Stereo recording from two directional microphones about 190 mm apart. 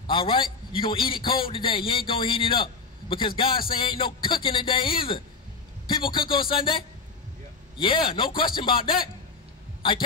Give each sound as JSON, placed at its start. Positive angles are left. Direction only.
{"t": 0.0, "sound": "a man's voice", "side_deg": 25}
{"t": 7.8, "sound": "a man's voice", "side_deg": 25}